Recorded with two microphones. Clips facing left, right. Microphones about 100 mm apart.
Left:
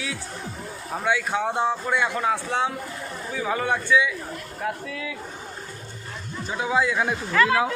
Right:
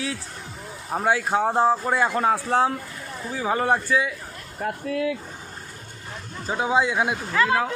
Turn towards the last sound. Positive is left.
turn(degrees=-15)  # may be behind; listen again after turning